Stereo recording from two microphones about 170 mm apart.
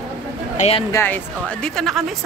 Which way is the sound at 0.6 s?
35° left (ahead or behind).